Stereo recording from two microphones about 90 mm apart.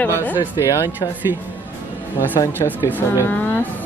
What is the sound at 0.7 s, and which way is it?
Speech, 45° left (ahead or behind).